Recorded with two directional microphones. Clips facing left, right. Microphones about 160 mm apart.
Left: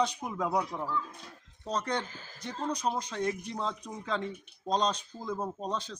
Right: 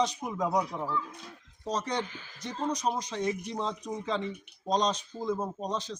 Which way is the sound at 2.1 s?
40° left (ahead or behind).